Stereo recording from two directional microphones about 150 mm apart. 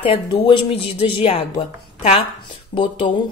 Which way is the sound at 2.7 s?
35° left (ahead or behind).